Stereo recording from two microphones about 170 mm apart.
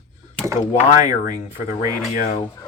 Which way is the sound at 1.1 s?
50° left (ahead or behind).